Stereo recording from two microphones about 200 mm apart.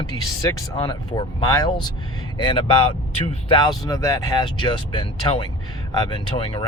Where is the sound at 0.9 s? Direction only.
20° left (ahead or behind).